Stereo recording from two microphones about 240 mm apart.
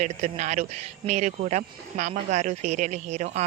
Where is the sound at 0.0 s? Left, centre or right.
Right.